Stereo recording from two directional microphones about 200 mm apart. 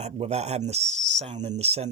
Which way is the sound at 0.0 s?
35° right (ahead or behind).